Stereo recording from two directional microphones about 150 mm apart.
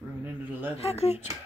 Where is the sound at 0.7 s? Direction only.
45° left (ahead or behind).